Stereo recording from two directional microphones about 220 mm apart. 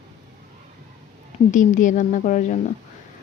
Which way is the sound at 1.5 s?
35° left (ahead or behind).